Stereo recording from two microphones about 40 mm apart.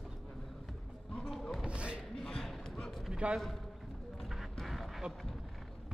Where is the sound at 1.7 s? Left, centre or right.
Right.